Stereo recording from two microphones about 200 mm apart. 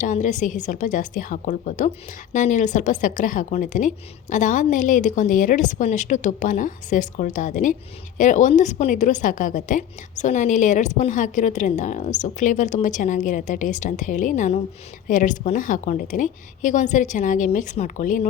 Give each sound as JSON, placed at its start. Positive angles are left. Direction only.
{"t": 0.0, "sound": "a woman's voice", "side_deg": 40}